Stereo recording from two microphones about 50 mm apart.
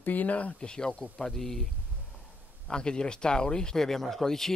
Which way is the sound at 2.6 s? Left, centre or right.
Centre.